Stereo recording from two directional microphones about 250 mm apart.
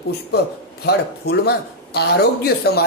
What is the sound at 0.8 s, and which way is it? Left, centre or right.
Speech, left.